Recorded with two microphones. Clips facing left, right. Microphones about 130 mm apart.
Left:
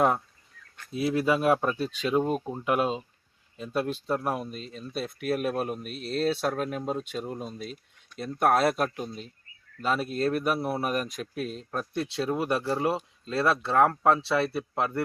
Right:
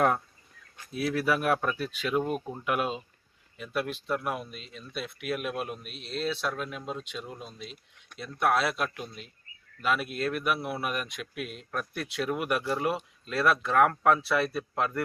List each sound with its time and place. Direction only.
0.9 s speech: 25° left (ahead or behind)